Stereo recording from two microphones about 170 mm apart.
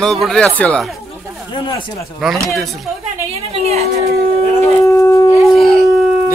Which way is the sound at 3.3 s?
40° right (ahead or behind).